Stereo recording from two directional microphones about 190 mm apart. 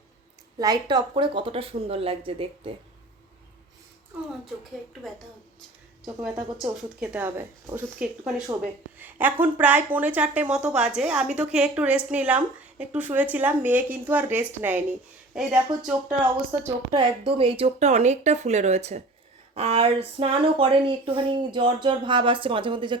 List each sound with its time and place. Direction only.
0.6 s speech: 20° right (ahead or behind)
6.2 s a woman's voice: 5° right (ahead or behind)
16.9 s speech: 25° right (ahead or behind)